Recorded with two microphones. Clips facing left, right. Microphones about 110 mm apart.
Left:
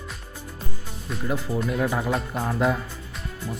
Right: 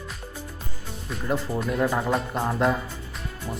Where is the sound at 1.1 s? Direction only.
Centre (ahead or behind).